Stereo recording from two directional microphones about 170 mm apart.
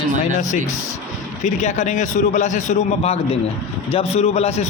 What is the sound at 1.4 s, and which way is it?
A man's voice, 45° left (ahead or behind).